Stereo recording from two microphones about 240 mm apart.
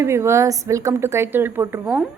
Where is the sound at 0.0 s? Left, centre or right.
Centre.